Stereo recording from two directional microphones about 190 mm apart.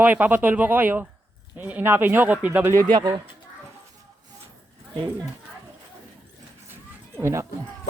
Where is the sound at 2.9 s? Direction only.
20° right (ahead or behind).